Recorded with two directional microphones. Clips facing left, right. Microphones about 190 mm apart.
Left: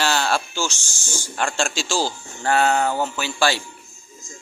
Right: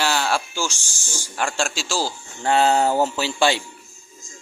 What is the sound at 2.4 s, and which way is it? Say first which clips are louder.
Music: right 1 dB; 25° right (ahead or behind).